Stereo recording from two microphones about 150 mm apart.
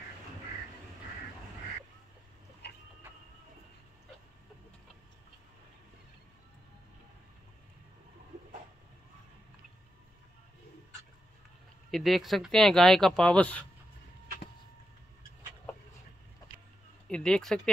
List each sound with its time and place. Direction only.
2.6 s a sound: 90° left
11.9 s speech: centre (ahead or behind)
17.1 s speech: 5° left (ahead or behind)